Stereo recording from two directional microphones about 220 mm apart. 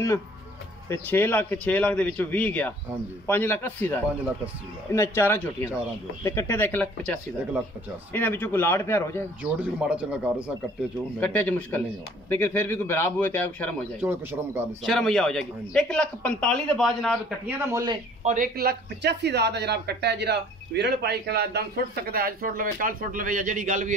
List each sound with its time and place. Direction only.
0.8 s a man's voice: 10° left (ahead or behind)
8.1 s a man's voice: 10° left (ahead or behind)
9.4 s speech: 5° right (ahead or behind)
11.1 s a man's voice: 5° left (ahead or behind)
14.0 s a man's voice: 10° right (ahead or behind)
14.8 s speech: centre (ahead or behind)
17.6 s a man's voice: 15° right (ahead or behind)
18.2 s speech: 35° right (ahead or behind)